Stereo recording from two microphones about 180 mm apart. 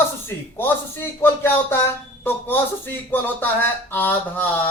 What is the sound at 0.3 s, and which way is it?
Speech, 10° left (ahead or behind).